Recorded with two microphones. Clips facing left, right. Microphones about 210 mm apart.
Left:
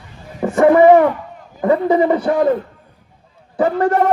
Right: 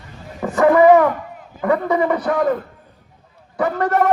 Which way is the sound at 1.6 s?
25° left (ahead or behind).